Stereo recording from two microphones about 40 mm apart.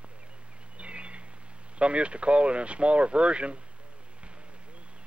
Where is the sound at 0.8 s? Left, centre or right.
Right.